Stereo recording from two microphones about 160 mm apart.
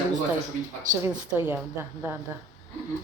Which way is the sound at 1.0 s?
15° right (ahead or behind).